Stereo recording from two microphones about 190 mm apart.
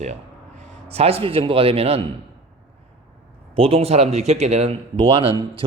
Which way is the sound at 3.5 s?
30° right (ahead or behind).